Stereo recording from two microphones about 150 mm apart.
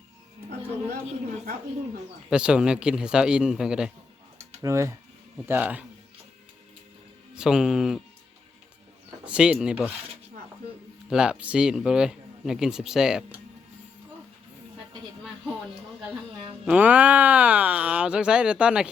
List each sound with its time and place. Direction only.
2.3 s a man's voice: 5° right (ahead or behind)
4.6 s speech: 20° right (ahead or behind)
7.3 s a man's voice: 5° right (ahead or behind)
9.2 s speech: 5° right (ahead or behind)
11.1 s a man's voice: 5° right (ahead or behind)
16.6 s speech: 10° right (ahead or behind)